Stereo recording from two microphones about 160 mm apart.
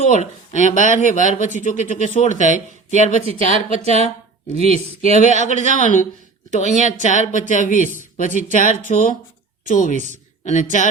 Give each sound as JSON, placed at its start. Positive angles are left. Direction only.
{"t": 0.1, "sound": "speech", "side_deg": 50}
{"t": 5.3, "sound": "speech", "side_deg": -50}
{"t": 5.7, "sound": "speech", "side_deg": 50}